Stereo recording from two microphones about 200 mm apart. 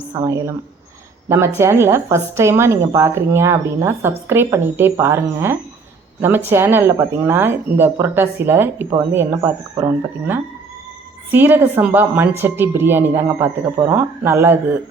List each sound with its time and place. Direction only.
0.1 s a woman's voice: 15° right (ahead or behind)